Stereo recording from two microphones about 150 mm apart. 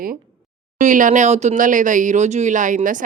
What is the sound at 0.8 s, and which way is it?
Speech, 60° right (ahead or behind).